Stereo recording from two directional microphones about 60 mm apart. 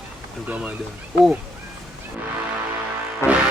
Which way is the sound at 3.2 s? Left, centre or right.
Left.